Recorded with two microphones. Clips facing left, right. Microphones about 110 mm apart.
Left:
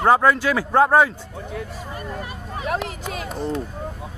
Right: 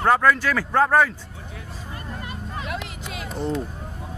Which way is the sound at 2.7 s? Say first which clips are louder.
Left 6 dB; 50° left (ahead or behind).